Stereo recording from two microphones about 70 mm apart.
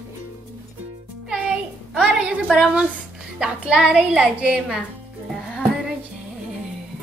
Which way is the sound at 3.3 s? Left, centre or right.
Centre.